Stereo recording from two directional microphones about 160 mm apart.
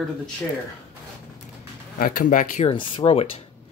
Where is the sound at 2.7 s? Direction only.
30° left (ahead or behind).